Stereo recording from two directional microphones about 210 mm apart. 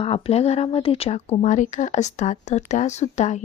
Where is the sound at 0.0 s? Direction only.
25° left (ahead or behind).